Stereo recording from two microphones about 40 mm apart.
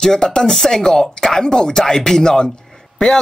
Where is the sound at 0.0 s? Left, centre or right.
Centre.